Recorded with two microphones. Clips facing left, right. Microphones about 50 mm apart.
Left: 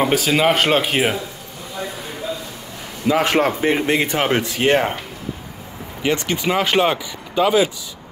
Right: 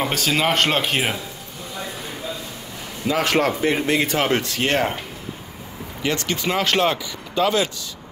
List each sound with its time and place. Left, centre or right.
0.0 s speech: centre
3.1 s speech: centre
6.0 s speech: centre